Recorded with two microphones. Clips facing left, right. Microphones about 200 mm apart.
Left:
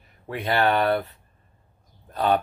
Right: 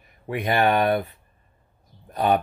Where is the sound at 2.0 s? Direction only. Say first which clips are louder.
Right 1 dB; 15° right (ahead or behind).